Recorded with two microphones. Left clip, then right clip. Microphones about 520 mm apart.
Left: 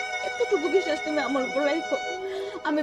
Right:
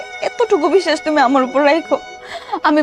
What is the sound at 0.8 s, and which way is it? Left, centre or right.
A woman's voice, right.